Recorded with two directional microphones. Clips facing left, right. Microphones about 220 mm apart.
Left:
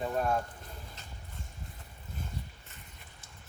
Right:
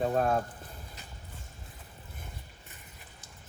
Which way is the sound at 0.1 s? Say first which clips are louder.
Right 3 dB; 50° right (ahead or behind).